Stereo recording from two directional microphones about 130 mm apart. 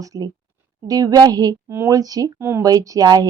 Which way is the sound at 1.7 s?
15° right (ahead or behind).